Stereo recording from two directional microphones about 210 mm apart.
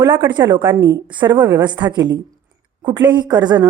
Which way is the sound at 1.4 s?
10° right (ahead or behind).